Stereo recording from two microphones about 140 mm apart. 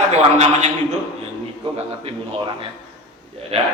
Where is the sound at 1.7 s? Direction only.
45° right (ahead or behind).